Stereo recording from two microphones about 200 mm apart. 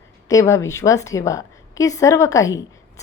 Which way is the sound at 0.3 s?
15° left (ahead or behind).